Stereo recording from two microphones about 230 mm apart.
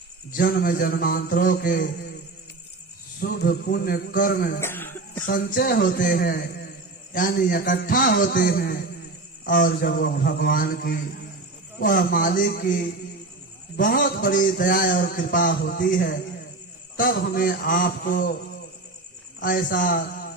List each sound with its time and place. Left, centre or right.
0.3 s a man's voice: left
3.2 s a man's voice: left
4.6 s cough: centre
5.2 s a man's voice: left
19.4 s a man's voice: left